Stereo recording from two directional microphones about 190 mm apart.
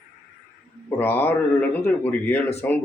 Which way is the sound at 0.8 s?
10° left (ahead or behind).